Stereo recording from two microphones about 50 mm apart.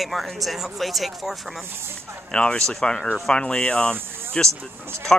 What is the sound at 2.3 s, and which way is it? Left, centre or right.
Speech, centre.